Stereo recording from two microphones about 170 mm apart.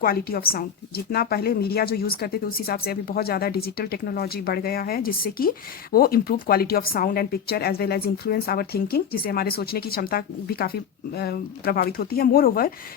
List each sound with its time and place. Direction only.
0.0 s a woman's voice: 60° left (ahead or behind)